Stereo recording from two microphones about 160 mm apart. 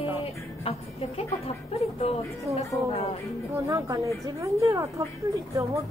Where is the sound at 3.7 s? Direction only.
20° right (ahead or behind).